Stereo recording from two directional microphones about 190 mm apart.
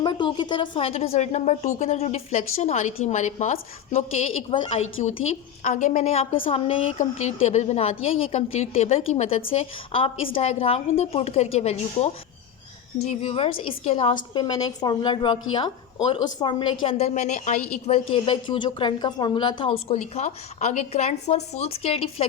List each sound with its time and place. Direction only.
0.0 s a woman's voice: 25° left (ahead or behind)
18.1 s a woman's voice: 25° left (ahead or behind)
19.9 s a woman's voice: 35° left (ahead or behind)